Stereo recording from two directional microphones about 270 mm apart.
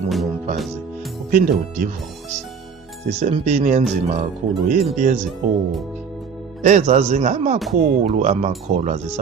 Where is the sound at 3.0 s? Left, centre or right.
Right.